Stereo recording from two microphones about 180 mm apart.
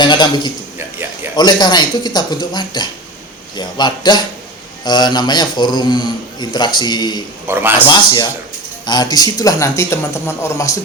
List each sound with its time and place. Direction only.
0.0 s a man's voice: 25° left (ahead or behind)
0.8 s a man's voice: 15° right (ahead or behind)
1.4 s a man's voice: 25° left (ahead or behind)
7.4 s a man's voice: 10° right (ahead or behind)
7.9 s a man's voice: 25° left (ahead or behind)